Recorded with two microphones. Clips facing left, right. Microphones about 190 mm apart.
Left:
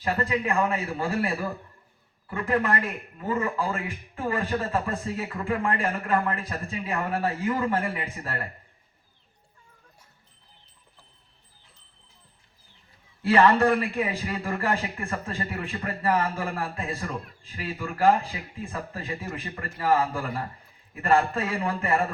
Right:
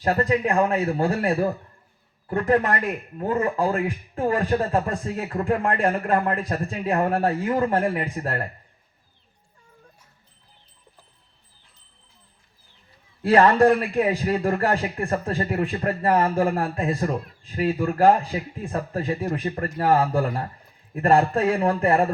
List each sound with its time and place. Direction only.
0.0 s a man's voice: 40° right (ahead or behind)
13.2 s a man's voice: 45° right (ahead or behind)